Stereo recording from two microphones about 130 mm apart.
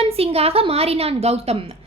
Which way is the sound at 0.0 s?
50° right (ahead or behind).